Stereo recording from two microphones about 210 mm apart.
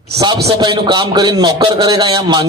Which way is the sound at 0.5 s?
20° right (ahead or behind).